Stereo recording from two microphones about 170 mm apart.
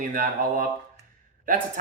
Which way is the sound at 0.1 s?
55° right (ahead or behind).